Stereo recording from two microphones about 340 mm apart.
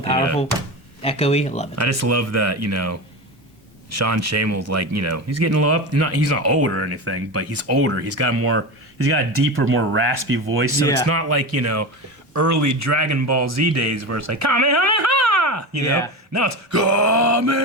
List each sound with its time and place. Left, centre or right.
1.0 s speech: centre
1.7 s speech: right
15.8 s speech: centre
16.3 s speech: right